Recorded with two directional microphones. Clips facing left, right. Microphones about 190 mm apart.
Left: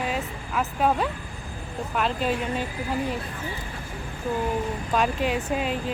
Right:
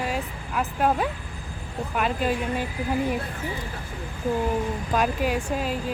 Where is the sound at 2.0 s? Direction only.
5° right (ahead or behind).